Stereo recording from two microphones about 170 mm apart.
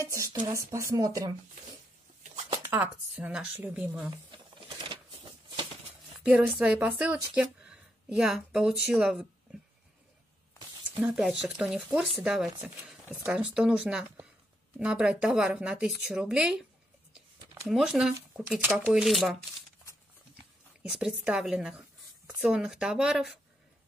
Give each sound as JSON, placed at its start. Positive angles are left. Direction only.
{"t": 0.0, "sound": "speech", "side_deg": -20}
{"t": 2.6, "sound": "speech", "side_deg": -10}
{"t": 4.3, "sound": "a sound", "side_deg": -30}
{"t": 6.3, "sound": "a woman's voice", "side_deg": -5}
{"t": 11.0, "sound": "speech", "side_deg": 0}
{"t": 17.6, "sound": "speech", "side_deg": -5}
{"t": 20.9, "sound": "speech", "side_deg": -5}